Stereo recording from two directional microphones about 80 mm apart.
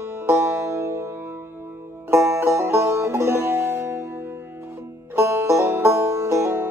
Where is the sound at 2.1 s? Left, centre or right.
Right.